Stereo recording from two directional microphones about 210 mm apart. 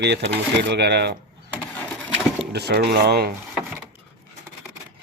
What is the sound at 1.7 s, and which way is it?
Sewing machine, centre (ahead or behind).